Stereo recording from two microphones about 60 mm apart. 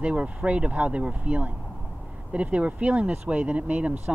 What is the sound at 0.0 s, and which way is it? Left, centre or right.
Speech, right.